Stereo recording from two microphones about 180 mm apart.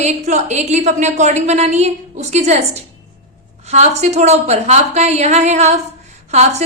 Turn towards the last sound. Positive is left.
turn(degrees=-40)  # may be behind; listen again after turning